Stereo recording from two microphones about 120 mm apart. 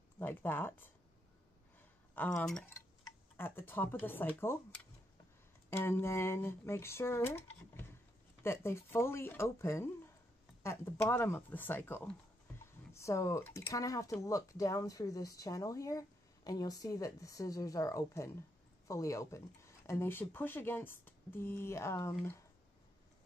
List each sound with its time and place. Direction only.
0.2 s speech: 15° left (ahead or behind)
2.1 s speech: 10° left (ahead or behind)
3.3 s speech: 20° left (ahead or behind)
5.7 s speech: 20° left (ahead or behind)
12.5 s typing: 25° left (ahead or behind)
13.6 s speech: 25° left (ahead or behind)